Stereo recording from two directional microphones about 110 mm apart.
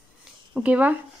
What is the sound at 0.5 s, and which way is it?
Speech, 10° right (ahead or behind).